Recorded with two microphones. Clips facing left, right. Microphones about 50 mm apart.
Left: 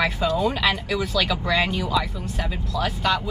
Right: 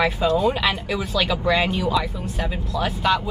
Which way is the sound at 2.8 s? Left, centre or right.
Centre.